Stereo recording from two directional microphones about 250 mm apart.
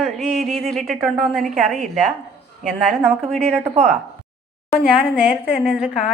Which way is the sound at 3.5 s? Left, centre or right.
Right.